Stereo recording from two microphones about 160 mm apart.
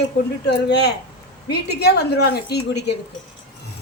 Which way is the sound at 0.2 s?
90° left.